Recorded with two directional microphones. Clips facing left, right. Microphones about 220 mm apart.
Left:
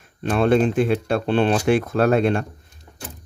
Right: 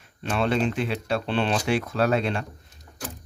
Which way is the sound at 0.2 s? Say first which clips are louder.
Left 7 dB; 50° left (ahead or behind).